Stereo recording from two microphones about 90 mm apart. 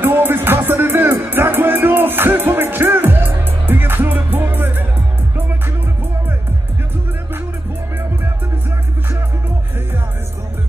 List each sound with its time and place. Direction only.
0.0 s music: 20° right (ahead or behind)